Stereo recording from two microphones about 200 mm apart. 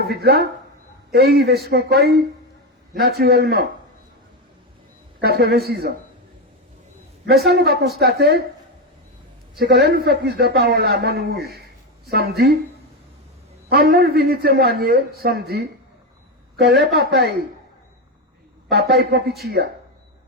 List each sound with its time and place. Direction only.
0.0 s a man's voice: 50° right (ahead or behind)
5.2 s a man's voice: 55° right (ahead or behind)
7.4 s a man's voice: 55° right (ahead or behind)
9.6 s a man's voice: 55° right (ahead or behind)
13.7 s a man's voice: 50° right (ahead or behind)
18.7 s a man's voice: 55° right (ahead or behind)